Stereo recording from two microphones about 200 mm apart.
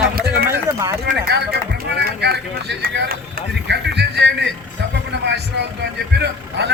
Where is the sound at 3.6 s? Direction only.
60° right (ahead or behind).